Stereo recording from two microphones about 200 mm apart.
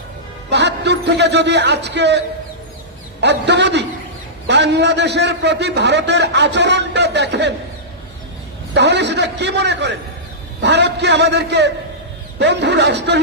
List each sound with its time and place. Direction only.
0.5 s a man's voice: 60° right (ahead or behind)
8.7 s a man's voice: 60° right (ahead or behind)